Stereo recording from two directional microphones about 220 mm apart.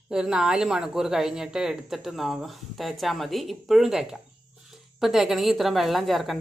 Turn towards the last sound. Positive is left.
turn(degrees=0)  # may be behind; listen again after turning